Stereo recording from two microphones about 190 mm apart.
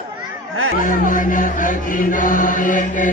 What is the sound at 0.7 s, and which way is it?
Chant, 45° left (ahead or behind).